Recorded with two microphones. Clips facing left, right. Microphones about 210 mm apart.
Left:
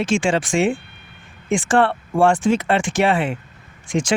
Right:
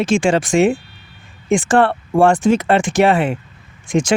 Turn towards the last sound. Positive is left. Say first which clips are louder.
# right 4 dB
turn(degrees=-45)  # may be behind; listen again after turning